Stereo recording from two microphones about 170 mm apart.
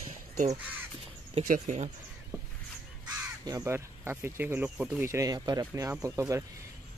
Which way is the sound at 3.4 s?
20° right (ahead or behind).